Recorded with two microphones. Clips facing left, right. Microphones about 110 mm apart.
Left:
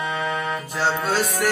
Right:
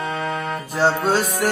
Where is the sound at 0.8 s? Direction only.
40° right (ahead or behind).